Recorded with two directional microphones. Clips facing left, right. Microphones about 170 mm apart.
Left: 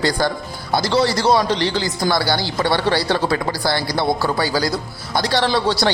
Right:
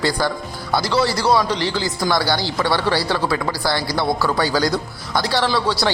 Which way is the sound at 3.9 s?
15° left (ahead or behind).